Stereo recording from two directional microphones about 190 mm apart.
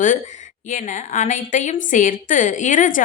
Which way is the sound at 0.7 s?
40° left (ahead or behind).